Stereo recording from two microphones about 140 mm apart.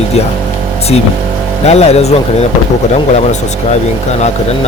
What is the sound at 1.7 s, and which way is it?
Speech, 50° left (ahead or behind).